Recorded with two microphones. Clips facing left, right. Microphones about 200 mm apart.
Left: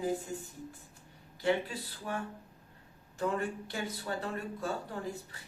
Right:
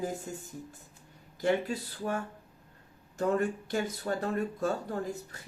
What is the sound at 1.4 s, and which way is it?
Speech, 45° right (ahead or behind).